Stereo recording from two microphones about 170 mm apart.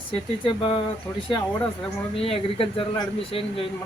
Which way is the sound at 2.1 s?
35° left (ahead or behind).